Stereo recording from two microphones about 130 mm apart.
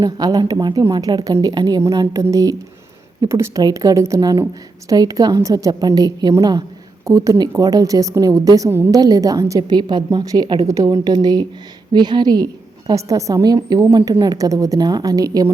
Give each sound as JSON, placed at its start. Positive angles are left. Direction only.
{"t": 0.0, "sound": "a woman's voice", "side_deg": -30}